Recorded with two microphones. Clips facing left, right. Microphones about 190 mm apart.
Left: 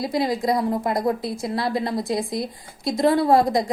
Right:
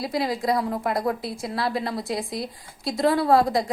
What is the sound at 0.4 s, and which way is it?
Speech, 20° left (ahead or behind).